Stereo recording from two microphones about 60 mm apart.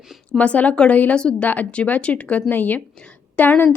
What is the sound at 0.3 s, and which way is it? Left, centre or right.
A woman's voice, left.